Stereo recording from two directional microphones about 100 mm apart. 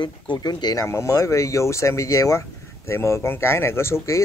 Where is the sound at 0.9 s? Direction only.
30° left (ahead or behind).